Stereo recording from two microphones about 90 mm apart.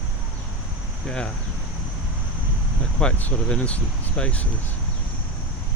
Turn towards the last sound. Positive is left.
turn(degrees=15)  # may be behind; listen again after turning